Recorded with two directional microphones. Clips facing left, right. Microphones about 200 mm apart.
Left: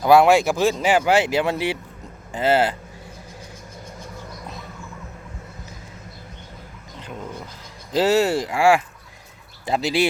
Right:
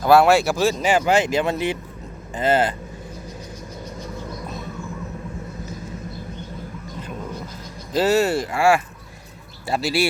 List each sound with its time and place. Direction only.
0.0 s speech: 15° left (ahead or behind)
7.9 s speech: 15° left (ahead or behind)